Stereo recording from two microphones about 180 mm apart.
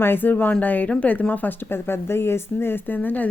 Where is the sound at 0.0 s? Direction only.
10° left (ahead or behind).